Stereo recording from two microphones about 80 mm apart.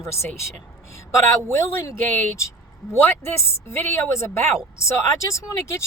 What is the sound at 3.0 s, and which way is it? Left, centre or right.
A woman's voice, left.